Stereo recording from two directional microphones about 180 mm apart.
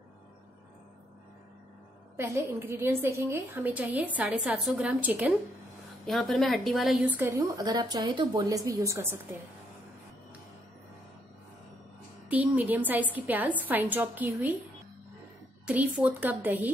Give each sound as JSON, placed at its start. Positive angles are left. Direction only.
{"t": 2.1, "sound": "a woman's voice", "side_deg": -15}
{"t": 12.3, "sound": "a woman's voice", "side_deg": -10}
{"t": 15.6, "sound": "a woman's voice", "side_deg": -10}